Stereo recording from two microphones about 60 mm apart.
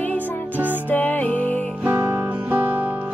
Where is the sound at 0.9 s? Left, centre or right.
Left.